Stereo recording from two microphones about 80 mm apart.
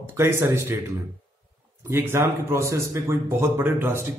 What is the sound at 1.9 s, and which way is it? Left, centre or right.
A man's voice, right.